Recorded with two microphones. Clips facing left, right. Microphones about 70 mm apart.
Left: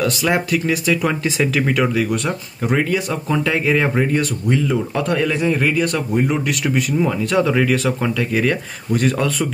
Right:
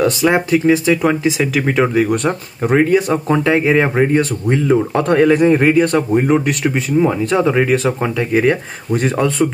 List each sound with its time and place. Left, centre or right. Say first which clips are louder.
0.0 s speech: right 5 dB; right
2.0 s speech: right 4 dB; right
6.6 s speech: right 4 dB; right